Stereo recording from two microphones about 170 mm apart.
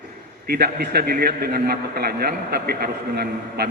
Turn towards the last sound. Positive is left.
turn(degrees=-65)  # may be behind; listen again after turning